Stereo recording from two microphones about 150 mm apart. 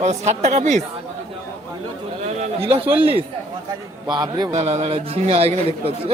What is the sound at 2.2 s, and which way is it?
Speech, 50° right (ahead or behind).